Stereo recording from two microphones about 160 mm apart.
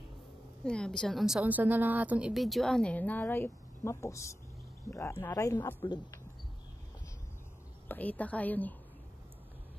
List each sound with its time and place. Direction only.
0.7 s a woman's voice: 5° left (ahead or behind)
7.9 s a woman's voice: 10° left (ahead or behind)